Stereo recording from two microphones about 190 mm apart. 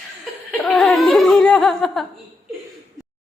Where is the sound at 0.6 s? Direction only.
Centre (ahead or behind).